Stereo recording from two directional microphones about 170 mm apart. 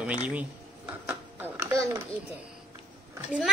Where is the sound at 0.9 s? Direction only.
10° right (ahead or behind).